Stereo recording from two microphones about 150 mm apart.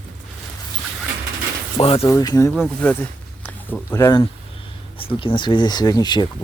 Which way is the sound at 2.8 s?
10° left (ahead or behind).